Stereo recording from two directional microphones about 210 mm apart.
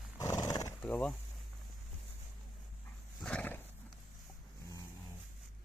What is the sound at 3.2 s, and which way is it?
Wild animals, 5° left (ahead or behind).